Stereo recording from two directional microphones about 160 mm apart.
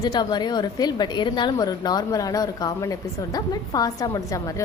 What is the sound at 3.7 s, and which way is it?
Speech, 25° left (ahead or behind).